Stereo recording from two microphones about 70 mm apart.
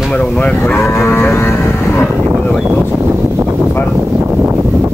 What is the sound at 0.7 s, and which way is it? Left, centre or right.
Livestock, left.